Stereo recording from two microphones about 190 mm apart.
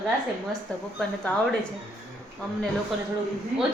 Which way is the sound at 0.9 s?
5° left (ahead or behind).